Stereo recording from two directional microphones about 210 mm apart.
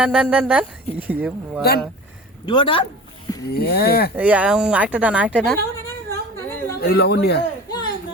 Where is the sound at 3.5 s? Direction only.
50° left (ahead or behind).